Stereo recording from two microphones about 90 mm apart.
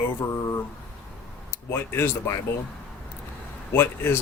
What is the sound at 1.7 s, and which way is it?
Speech, 25° left (ahead or behind).